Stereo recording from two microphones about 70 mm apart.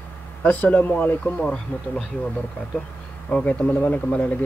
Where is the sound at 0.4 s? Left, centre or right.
Left.